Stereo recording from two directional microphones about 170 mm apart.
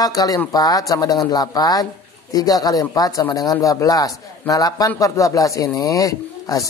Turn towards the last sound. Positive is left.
turn(degrees=20)  # may be behind; listen again after turning